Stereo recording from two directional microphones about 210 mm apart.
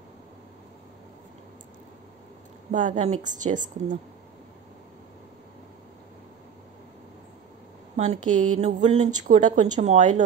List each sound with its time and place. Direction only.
2.7 s speech: 35° right (ahead or behind)
7.9 s speech: 35° right (ahead or behind)